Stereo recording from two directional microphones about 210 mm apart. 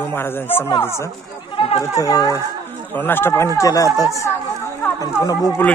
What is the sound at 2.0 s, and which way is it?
Speech, 15° left (ahead or behind).